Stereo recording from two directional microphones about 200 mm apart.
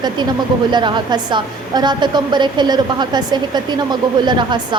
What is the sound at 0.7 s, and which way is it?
A woman's voice, 20° right (ahead or behind).